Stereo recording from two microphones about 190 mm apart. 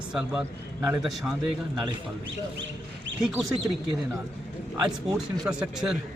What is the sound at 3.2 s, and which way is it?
Speech, 5° right (ahead or behind).